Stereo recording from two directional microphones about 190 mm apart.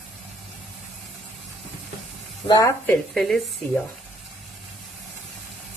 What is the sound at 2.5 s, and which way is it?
Speech, 15° left (ahead or behind).